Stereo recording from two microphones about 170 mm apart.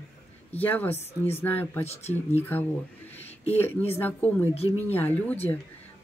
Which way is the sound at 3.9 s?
10° left (ahead or behind).